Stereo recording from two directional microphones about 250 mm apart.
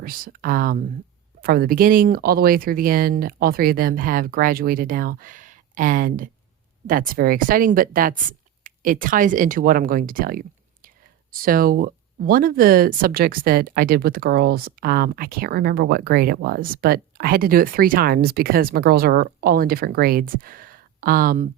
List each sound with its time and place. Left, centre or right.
0.0 s speech: right